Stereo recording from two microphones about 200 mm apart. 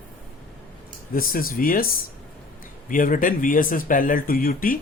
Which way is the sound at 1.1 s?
45° left (ahead or behind).